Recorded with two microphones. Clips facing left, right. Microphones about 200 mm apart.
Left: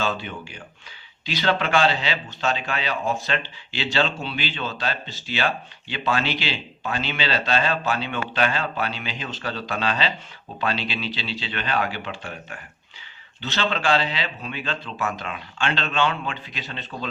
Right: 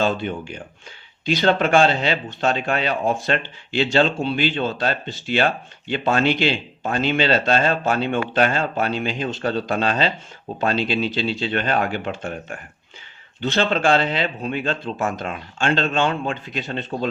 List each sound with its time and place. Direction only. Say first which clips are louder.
0.0 s speech: right 6 dB; 50° right (ahead or behind)